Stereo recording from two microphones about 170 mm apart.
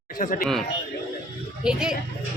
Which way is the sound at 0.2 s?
50° left (ahead or behind).